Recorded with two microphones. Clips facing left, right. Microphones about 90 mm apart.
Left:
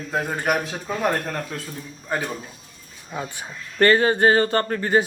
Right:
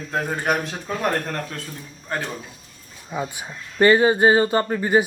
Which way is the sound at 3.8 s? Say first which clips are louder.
Right 2 dB; 10° right (ahead or behind).